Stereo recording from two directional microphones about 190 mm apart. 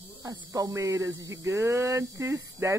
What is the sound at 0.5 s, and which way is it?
Speech, 15° right (ahead or behind).